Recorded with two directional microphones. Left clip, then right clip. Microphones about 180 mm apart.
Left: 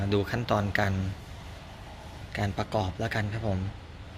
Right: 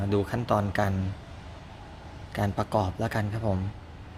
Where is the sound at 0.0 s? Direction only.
15° right (ahead or behind).